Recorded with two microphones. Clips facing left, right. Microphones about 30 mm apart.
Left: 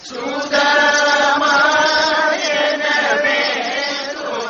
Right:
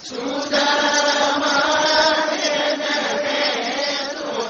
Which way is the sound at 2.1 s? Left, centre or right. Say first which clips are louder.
Left 4 dB; left.